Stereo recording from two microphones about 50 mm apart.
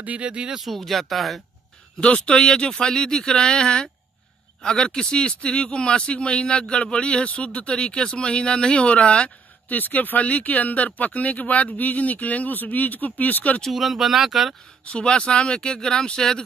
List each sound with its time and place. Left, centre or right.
0.2 s speech: centre
0.6 s speech: centre
2.0 s speech: left
13.7 s speech: centre
14.9 s speech: centre